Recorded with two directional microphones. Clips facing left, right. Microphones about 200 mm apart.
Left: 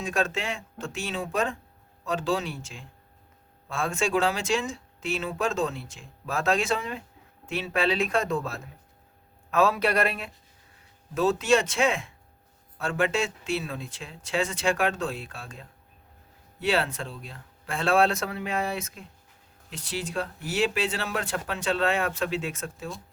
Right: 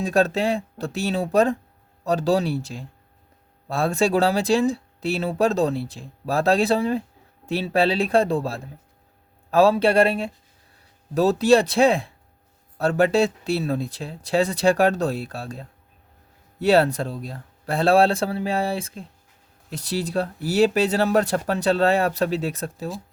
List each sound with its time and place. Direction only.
0.0 s speech: 35° right (ahead or behind)